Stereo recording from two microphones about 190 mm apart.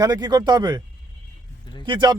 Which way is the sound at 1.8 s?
25° right (ahead or behind).